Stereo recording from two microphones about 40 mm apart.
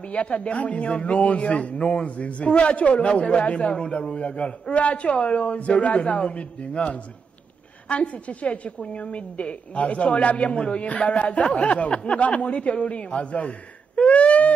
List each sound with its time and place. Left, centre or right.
0.0 s a man's voice: left